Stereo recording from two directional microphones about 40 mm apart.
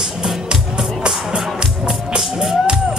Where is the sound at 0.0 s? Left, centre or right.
Centre.